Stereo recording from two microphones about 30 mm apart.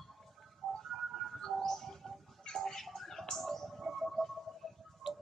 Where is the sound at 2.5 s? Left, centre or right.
Centre.